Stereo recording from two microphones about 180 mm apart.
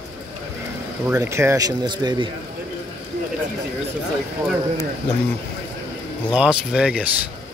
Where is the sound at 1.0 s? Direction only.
15° right (ahead or behind).